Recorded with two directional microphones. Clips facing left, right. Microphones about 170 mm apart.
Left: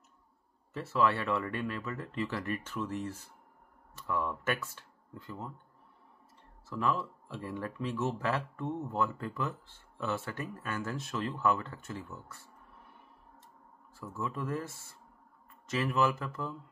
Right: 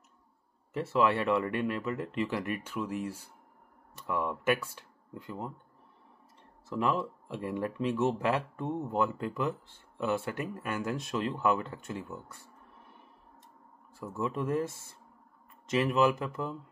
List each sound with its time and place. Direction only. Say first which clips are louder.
0.7 s speech: right 2 dB; 15° right (ahead or behind)
6.7 s speech: right 3 dB; 20° right (ahead or behind)
13.9 s speech: right 4 dB; 20° right (ahead or behind)